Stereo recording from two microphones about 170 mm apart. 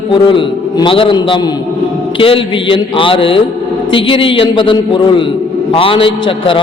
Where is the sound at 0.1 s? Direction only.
30° left (ahead or behind).